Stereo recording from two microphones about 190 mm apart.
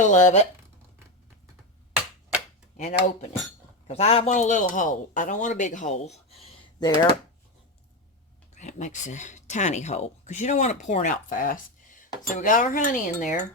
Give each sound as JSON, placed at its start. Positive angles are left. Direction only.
{"t": 0.0, "sound": "speech", "side_deg": 40}
{"t": 2.7, "sound": "speech", "side_deg": 35}
{"t": 8.5, "sound": "speech", "side_deg": 40}